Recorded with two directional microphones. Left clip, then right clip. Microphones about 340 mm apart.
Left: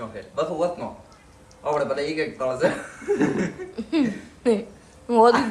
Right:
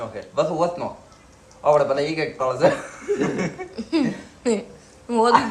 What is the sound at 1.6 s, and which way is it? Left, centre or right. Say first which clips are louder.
A woman's voice: right 6 dB; centre.